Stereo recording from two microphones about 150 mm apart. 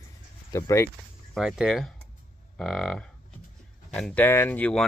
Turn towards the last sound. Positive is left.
turn(degrees=10)  # may be behind; listen again after turning